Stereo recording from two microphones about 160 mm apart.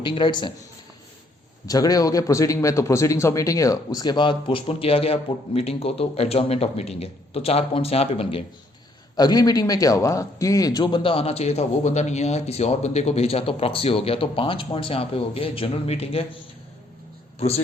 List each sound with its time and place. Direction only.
0.0 s speech: 30° left (ahead or behind)
1.6 s a man's voice: 25° left (ahead or behind)
9.1 s a man's voice: 25° left (ahead or behind)